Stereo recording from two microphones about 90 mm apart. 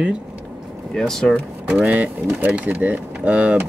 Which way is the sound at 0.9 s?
5° left (ahead or behind).